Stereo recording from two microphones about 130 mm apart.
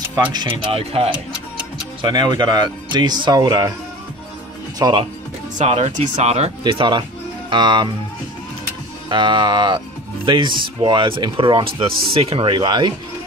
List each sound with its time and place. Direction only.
0.7 s speech: 45° right (ahead or behind)
2.0 s speech: 35° right (ahead or behind)
4.8 s speech: 30° right (ahead or behind)
5.6 s speech: 65° right (ahead or behind)
6.6 s speech: 35° right (ahead or behind)
9.1 s speech: 35° right (ahead or behind)